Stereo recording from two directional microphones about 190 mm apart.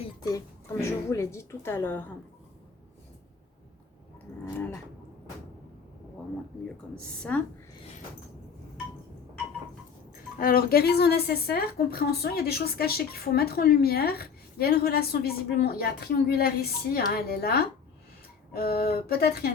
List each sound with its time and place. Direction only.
0.0 s a woman's voice: 20° left (ahead or behind)
4.4 s a woman's voice: 10° left (ahead or behind)
7.2 s a woman's voice: 5° left (ahead or behind)
10.3 s a woman's voice: 50° left (ahead or behind)